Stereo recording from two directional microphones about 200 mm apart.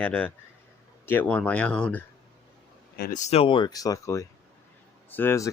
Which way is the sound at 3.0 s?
40° left (ahead or behind).